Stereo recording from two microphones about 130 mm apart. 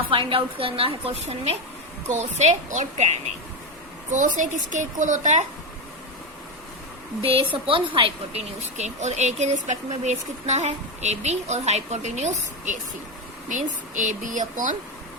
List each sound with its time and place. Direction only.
0.1 s a woman's voice: 40° right (ahead or behind)
2.0 s a woman's voice: 65° right (ahead or behind)
7.2 s speech: 45° right (ahead or behind); by 12.7 s 65° right (ahead or behind)
13.5 s a woman's voice: 75° right (ahead or behind)